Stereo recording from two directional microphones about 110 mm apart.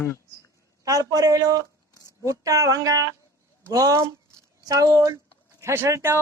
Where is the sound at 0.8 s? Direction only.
35° right (ahead or behind).